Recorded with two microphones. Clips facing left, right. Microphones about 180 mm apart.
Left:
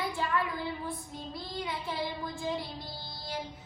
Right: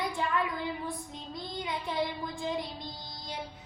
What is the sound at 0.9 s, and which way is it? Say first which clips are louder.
Child singing: even; 20° right (ahead or behind).